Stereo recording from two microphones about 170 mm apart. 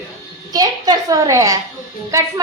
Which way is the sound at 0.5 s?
20° right (ahead or behind).